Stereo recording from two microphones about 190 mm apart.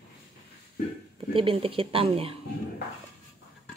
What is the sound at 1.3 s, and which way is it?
Speech, 30° right (ahead or behind).